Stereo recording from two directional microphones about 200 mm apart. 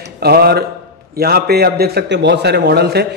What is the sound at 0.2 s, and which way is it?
A man's voice, 50° right (ahead or behind).